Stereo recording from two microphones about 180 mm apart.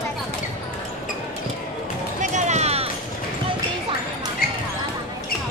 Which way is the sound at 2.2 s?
40° right (ahead or behind).